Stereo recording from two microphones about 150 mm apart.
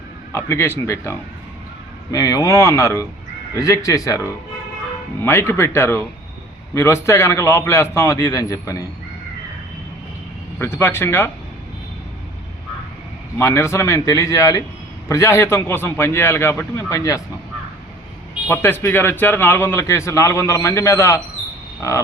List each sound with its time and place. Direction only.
0.3 s a man's voice: 15° left (ahead or behind)
10.6 s a man's voice: 15° left (ahead or behind)
13.4 s a man's voice: 20° left (ahead or behind)
18.4 s a man's voice: 15° left (ahead or behind)
21.8 s frog: 20° left (ahead or behind)